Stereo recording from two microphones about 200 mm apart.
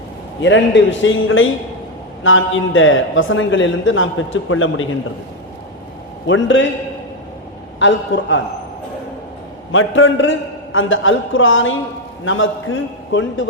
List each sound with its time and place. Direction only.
0.4 s a man's voice: 65° left (ahead or behind); by 4.9 s 85° left
6.2 s a man's voice: 65° left (ahead or behind)
7.8 s a man's voice: 65° left (ahead or behind)
9.7 s a man's voice: 75° left (ahead or behind)